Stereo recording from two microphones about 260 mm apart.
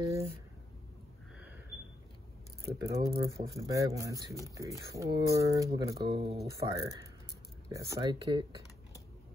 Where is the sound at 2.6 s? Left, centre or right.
Centre.